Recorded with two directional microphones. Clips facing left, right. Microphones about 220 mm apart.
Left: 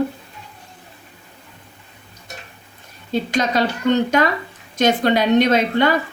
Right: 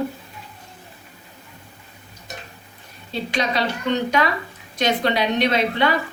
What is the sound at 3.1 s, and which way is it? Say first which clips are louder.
Speech: left 4 dB; 45° left (ahead or behind).